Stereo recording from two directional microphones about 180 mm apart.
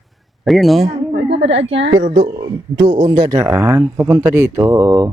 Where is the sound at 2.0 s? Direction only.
50° right (ahead or behind).